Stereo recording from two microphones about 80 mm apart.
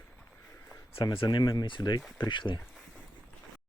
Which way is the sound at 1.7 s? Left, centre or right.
Left.